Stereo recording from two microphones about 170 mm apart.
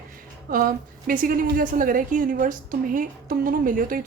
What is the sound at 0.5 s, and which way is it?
A woman's voice, 55° right (ahead or behind).